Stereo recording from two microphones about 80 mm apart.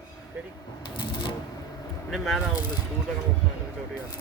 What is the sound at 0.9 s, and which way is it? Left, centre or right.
Typewriter, left.